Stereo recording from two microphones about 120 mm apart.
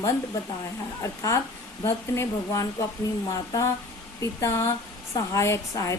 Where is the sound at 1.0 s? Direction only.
25° left (ahead or behind).